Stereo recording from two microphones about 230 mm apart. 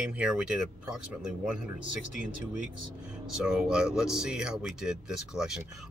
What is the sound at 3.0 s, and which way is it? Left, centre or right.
Speech, centre.